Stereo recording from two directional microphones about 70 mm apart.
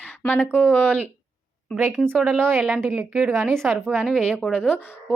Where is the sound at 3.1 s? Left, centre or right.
Centre.